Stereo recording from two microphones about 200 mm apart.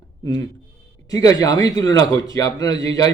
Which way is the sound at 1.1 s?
15° left (ahead or behind).